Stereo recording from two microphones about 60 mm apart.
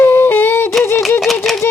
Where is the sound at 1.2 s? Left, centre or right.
Centre.